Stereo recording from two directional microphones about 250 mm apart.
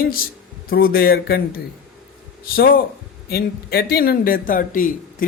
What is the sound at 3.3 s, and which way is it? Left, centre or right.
Speech, left.